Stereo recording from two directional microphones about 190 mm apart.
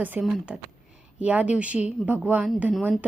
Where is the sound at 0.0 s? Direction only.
5° right (ahead or behind).